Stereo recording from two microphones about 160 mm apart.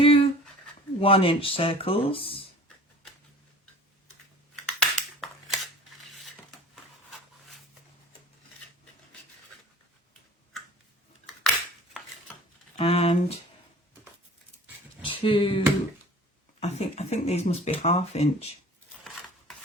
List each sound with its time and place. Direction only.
0.0 s a sound: 35° left (ahead or behind)
0.9 s speech: 35° left (ahead or behind)
4.8 s a sound: centre (ahead or behind)
12.7 s speech: 40° left (ahead or behind)
15.0 s speech: 35° left (ahead or behind)
16.6 s speech: 40° left (ahead or behind)